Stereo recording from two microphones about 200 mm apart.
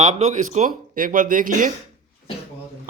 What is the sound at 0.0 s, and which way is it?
A man's voice, 35° right (ahead or behind).